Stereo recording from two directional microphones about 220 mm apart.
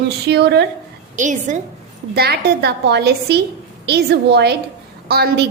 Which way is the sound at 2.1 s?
45° right (ahead or behind).